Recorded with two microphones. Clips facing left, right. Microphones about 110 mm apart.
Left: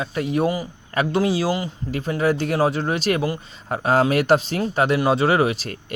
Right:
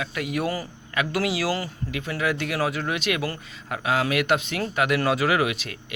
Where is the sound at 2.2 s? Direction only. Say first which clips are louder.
Left 6 dB; 35° left (ahead or behind).